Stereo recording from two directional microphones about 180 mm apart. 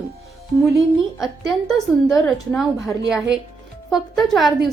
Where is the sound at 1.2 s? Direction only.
Centre (ahead or behind).